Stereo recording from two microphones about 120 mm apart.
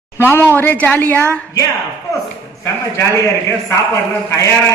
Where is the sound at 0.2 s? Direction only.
20° left (ahead or behind).